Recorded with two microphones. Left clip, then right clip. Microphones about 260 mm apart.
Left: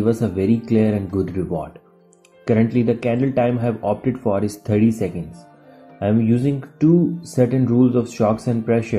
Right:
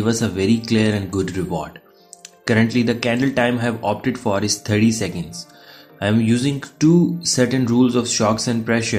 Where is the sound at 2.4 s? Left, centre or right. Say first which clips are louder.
Even; centre.